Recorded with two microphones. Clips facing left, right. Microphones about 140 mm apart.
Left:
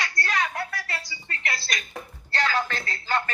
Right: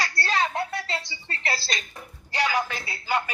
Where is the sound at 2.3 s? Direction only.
10° right (ahead or behind).